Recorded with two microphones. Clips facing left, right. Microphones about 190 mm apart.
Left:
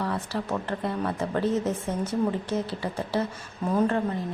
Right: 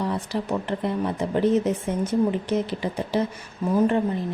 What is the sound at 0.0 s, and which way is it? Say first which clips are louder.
A woman's voice: right 3 dB; 15° right (ahead or behind).